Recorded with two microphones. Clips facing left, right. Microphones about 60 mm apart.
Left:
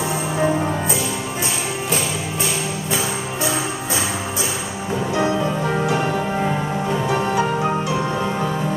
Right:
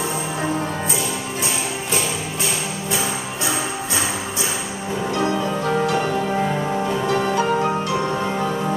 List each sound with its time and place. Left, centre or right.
5.1 s music: centre
6.9 s music: centre